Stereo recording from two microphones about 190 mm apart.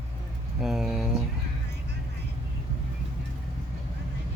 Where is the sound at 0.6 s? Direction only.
Centre (ahead or behind).